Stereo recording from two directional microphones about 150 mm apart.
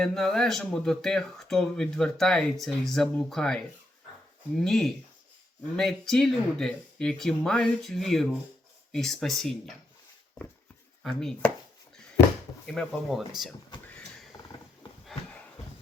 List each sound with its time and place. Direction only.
0.0 s speech: 5° left (ahead or behind)
11.0 s speech: centre (ahead or behind)
12.6 s speech: 5° left (ahead or behind)